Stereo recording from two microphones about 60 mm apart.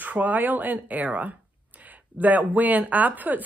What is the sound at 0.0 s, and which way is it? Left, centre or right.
Speech, right.